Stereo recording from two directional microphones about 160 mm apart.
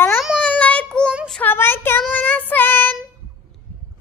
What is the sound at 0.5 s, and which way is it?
Child singing, 10° left (ahead or behind).